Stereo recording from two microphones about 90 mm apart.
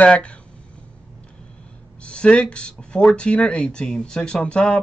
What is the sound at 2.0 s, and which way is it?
Speech, 10° left (ahead or behind).